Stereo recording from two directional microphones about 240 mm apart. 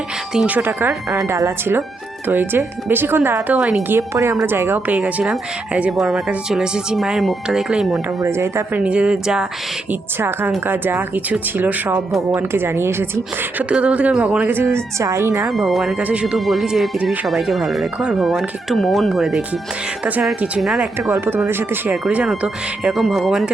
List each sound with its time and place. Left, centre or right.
0.3 s speech: centre
15.4 s speech: centre